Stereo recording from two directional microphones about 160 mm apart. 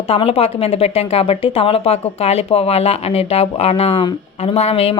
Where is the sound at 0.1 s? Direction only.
40° left (ahead or behind).